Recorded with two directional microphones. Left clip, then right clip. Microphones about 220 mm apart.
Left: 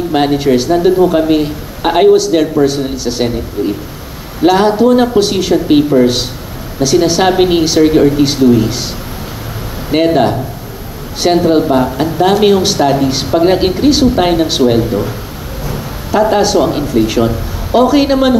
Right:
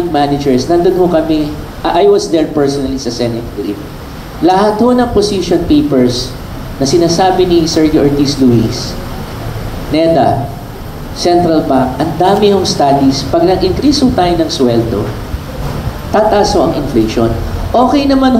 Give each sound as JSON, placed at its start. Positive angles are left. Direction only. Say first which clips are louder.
{"t": 0.1, "sound": "speech", "louder": "left 2 dB", "side_deg": 55}
{"t": 4.5, "sound": "speech", "louder": "even", "side_deg": 55}
{"t": 9.9, "sound": "speech", "louder": "right 1 dB", "side_deg": 55}
{"t": 11.1, "sound": "speech", "louder": "right 1 dB", "side_deg": 55}
{"t": 16.1, "sound": "speech", "louder": "right 2 dB", "side_deg": 55}